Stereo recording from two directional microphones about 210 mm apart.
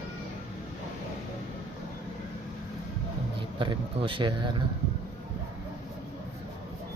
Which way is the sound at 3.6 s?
25° right (ahead or behind).